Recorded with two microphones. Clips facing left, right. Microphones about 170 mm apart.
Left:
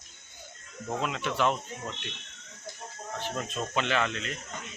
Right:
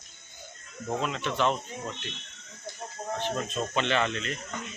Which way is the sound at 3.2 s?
5° left (ahead or behind).